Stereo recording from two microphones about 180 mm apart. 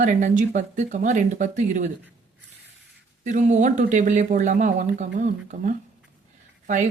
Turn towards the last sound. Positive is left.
turn(degrees=-45)  # may be behind; listen again after turning